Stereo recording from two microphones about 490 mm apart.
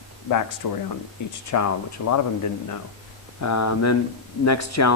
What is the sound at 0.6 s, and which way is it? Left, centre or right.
Speech, left.